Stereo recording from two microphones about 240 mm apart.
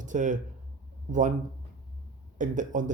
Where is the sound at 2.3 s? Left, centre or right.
Right.